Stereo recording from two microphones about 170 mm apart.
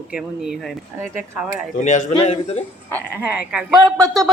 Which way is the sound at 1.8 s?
45° left (ahead or behind).